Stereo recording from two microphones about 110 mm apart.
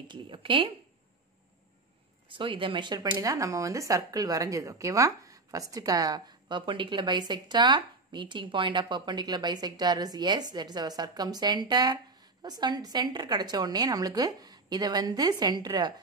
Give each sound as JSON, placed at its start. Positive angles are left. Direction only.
{"t": 0.1, "sound": "speech", "side_deg": -50}
{"t": 2.2, "sound": "speech", "side_deg": -50}